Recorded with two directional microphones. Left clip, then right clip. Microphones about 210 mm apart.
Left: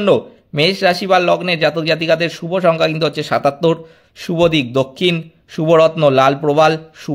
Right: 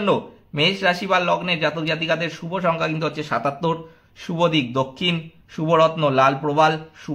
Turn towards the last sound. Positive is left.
turn(degrees=40)  # may be behind; listen again after turning